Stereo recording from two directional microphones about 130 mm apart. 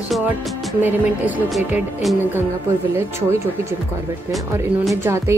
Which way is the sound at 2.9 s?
20° right (ahead or behind).